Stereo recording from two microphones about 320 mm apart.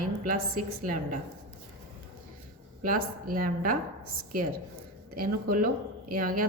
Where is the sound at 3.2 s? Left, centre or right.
Right.